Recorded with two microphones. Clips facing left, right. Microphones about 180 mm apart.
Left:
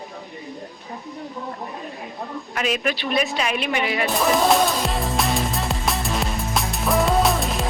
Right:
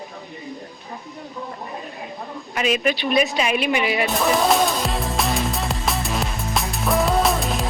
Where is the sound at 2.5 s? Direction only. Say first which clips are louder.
Right 3 dB; 5° right (ahead or behind).